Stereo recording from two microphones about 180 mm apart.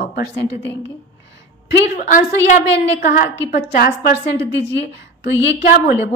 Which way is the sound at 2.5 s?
55° left (ahead or behind).